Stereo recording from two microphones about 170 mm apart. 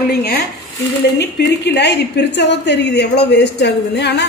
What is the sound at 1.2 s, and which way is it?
A woman's voice, 85° left.